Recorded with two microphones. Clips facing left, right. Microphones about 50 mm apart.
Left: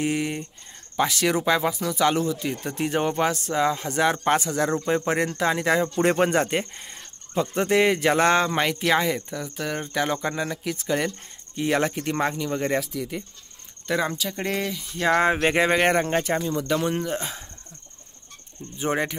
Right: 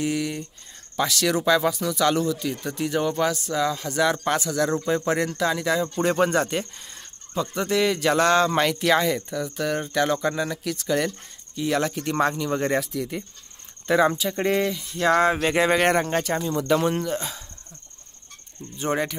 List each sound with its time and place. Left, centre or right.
0.0 s speech: left; by 13.2 s centre
13.8 s speech: centre
15.0 s speech: centre
17.1 s speech: left
18.8 s speech: centre